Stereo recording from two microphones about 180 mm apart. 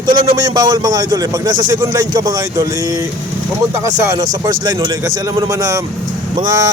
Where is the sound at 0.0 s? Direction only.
25° right (ahead or behind).